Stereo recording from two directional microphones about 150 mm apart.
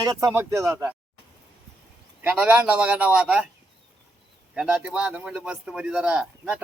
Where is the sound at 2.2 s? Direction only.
10° right (ahead or behind).